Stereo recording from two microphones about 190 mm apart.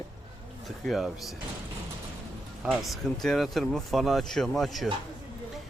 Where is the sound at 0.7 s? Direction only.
Centre (ahead or behind).